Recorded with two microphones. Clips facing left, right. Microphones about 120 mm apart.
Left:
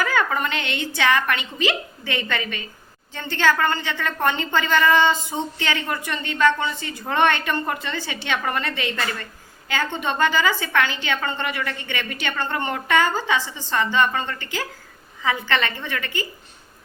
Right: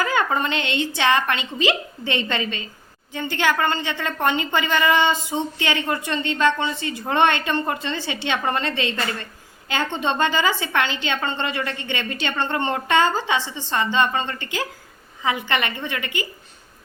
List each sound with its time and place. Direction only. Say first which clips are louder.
0.0 s a woman's voice: right 1 dB; 20° right (ahead or behind)